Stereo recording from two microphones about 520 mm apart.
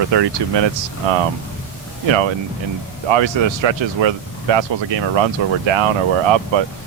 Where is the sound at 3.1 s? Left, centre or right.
Right.